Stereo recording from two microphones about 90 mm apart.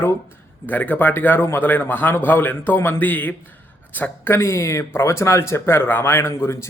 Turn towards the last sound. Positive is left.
turn(degrees=30)  # may be behind; listen again after turning